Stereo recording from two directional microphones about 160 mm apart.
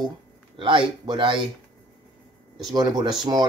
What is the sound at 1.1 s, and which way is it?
Speech, 30° right (ahead or behind).